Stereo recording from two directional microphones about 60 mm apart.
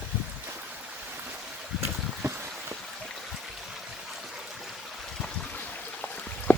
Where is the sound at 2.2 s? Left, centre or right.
Right.